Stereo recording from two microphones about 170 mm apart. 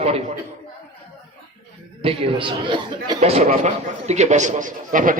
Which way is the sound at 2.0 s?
30° right (ahead or behind).